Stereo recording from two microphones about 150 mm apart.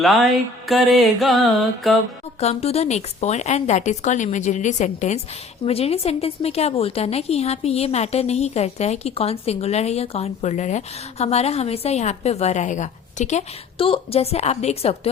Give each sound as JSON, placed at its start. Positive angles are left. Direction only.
{"t": 0.6, "sound": "music", "side_deg": 0}
{"t": 2.4, "sound": "speech", "side_deg": 45}
{"t": 13.7, "sound": "speech", "side_deg": 40}